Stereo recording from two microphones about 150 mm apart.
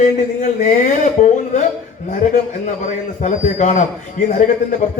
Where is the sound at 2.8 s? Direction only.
55° left (ahead or behind).